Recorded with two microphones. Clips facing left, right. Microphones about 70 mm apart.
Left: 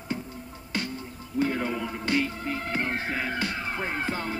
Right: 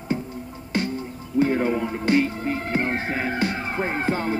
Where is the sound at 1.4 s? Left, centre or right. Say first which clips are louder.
Right 6 dB; right.